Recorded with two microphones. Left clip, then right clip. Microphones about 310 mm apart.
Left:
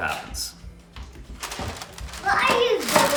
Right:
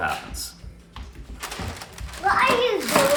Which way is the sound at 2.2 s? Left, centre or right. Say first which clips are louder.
Right 1 dB; centre.